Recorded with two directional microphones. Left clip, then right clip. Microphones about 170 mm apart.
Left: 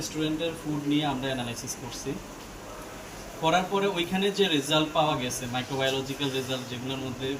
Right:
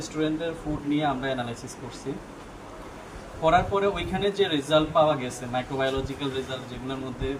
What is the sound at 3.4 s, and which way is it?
A man's voice, 15° right (ahead or behind).